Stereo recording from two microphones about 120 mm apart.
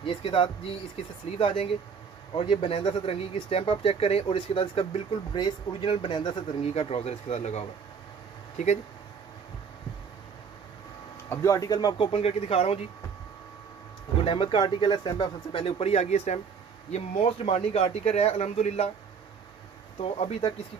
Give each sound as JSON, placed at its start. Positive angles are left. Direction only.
{"t": 0.0, "sound": "speech", "side_deg": 50}
{"t": 6.6, "sound": "speech", "side_deg": 55}
{"t": 11.2, "sound": "speech", "side_deg": 25}
{"t": 12.1, "sound": "speech", "side_deg": 55}
{"t": 14.2, "sound": "speech", "side_deg": 45}
{"t": 15.6, "sound": "speech", "side_deg": 60}
{"t": 20.0, "sound": "speech", "side_deg": 55}